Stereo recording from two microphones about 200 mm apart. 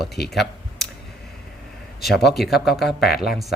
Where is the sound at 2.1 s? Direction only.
55° left (ahead or behind).